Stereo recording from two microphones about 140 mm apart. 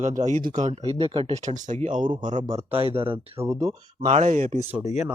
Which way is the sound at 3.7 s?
55° right (ahead or behind).